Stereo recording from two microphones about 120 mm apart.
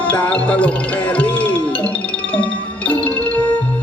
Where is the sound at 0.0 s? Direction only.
10° left (ahead or behind).